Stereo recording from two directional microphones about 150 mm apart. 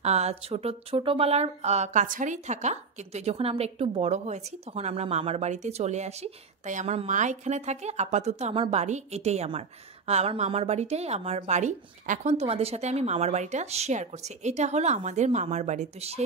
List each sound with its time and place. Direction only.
0.0 s speech: 45° right (ahead or behind)